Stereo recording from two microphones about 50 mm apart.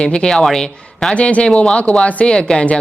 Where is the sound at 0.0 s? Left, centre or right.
Centre.